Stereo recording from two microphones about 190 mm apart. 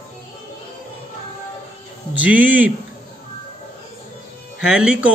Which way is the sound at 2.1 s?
10° right (ahead or behind).